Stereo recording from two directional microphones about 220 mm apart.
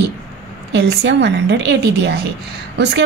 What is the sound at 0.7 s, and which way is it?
Speech, 50° right (ahead or behind).